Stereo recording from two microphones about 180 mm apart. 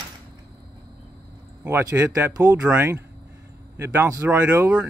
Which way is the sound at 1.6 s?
10° right (ahead or behind).